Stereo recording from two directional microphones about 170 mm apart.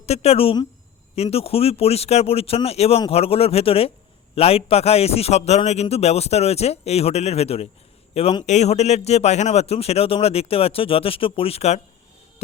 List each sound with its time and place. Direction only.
0.0 s a man's voice: 40° left (ahead or behind)